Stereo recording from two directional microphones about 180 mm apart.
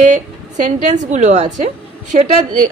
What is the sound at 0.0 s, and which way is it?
A woman's voice, 45° right (ahead or behind).